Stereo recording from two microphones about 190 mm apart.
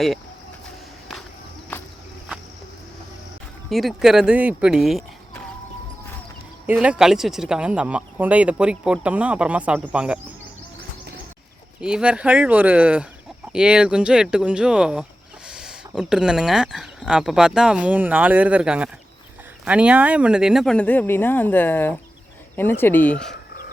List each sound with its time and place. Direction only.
1.7 s walk: 10° left (ahead or behind)
3.7 s speech: centre (ahead or behind)
6.7 s speech: 5° right (ahead or behind)
11.8 s speech: 5° right (ahead or behind)